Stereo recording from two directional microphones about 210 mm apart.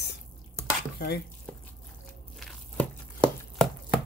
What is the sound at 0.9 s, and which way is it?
Chopping, 50° left (ahead or behind).